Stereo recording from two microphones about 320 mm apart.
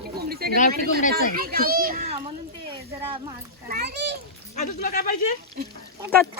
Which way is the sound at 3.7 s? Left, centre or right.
Right.